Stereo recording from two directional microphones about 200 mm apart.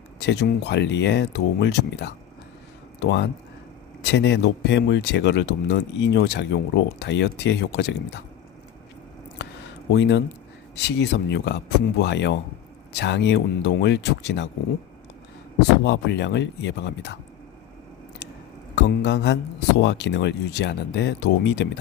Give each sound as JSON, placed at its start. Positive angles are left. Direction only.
{"t": 0.2, "sound": "speech", "side_deg": 60}
{"t": 9.9, "sound": "speech", "side_deg": 60}
{"t": 15.8, "sound": "speech", "side_deg": 60}
{"t": 18.8, "sound": "speech", "side_deg": 60}